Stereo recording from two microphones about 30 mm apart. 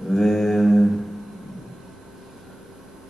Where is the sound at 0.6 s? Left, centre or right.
Centre.